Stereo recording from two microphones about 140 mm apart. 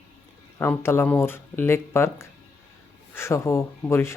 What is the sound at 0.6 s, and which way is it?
Speech, 15° left (ahead or behind).